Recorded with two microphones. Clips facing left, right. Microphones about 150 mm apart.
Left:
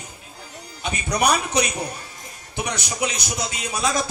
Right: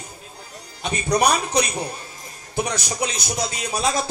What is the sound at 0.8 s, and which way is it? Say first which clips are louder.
Speech: right 3 dB; 35° right (ahead or behind).